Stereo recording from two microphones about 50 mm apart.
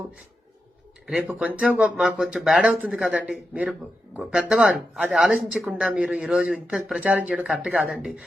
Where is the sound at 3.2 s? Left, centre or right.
Right.